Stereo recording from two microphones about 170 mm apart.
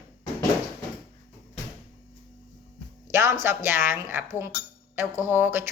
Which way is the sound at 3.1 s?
15° right (ahead or behind).